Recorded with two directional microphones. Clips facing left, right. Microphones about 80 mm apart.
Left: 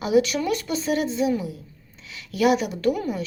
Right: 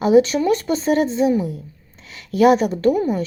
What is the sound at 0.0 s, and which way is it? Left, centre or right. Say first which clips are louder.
Speech: right 6 dB; right.